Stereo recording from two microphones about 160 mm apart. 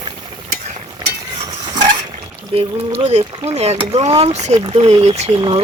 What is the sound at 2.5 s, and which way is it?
Speech, 40° right (ahead or behind).